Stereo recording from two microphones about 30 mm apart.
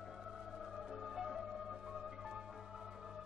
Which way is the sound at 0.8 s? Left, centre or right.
Centre.